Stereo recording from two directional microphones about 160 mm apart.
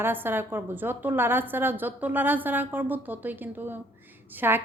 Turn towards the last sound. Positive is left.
turn(degrees=-15)  # may be behind; listen again after turning